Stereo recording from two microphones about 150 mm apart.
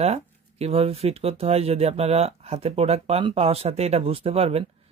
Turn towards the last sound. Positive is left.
turn(degrees=-40)  # may be behind; listen again after turning